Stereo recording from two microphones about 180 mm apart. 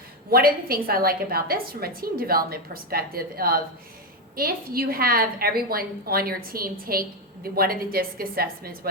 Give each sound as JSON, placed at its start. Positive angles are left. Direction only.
{"t": 0.3, "sound": "a woman's voice", "side_deg": -55}